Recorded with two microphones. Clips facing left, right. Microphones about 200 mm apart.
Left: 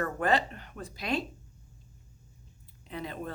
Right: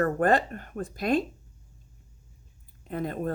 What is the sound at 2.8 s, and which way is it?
Speech, 50° right (ahead or behind).